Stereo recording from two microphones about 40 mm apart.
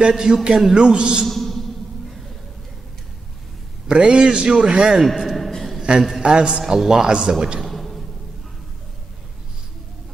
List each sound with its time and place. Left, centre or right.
0.1 s a man's voice: centre
1.2 s music: centre
3.9 s a man's voice: right
5.0 s a sound: centre
5.8 s a sound: centre
6.2 s a man's voice: right
6.6 s a man's voice: centre
6.9 s a man's voice: centre
7.6 s a sound: centre